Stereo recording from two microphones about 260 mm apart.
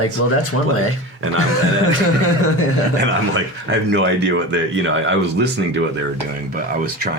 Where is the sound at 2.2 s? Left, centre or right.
Left.